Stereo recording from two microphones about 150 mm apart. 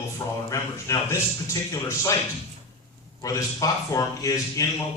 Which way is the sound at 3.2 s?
20° left (ahead or behind).